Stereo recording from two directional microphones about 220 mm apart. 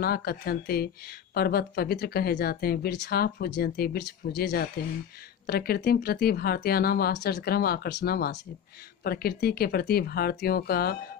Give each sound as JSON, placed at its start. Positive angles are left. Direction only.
{"t": 0.0, "sound": "speech", "side_deg": 45}